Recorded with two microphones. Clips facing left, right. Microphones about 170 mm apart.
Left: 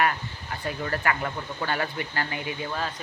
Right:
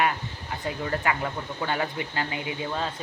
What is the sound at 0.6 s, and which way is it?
Speech, 20° right (ahead or behind).